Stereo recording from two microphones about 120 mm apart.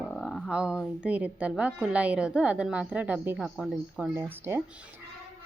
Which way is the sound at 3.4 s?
5° right (ahead or behind).